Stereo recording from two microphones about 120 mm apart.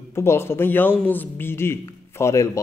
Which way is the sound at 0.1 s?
20° left (ahead or behind).